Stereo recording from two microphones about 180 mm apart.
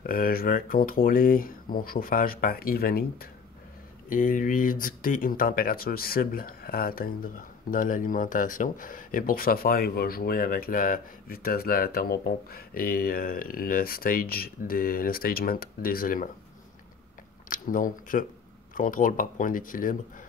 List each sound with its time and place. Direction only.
0.0 s speech: 55° left (ahead or behind)
17.5 s speech: 50° left (ahead or behind)